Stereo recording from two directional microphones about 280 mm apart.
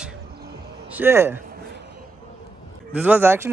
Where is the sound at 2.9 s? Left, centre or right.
Centre.